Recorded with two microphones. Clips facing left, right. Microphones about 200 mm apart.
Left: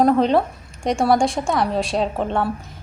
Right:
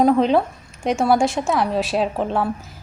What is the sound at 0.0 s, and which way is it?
A woman's voice, centre (ahead or behind).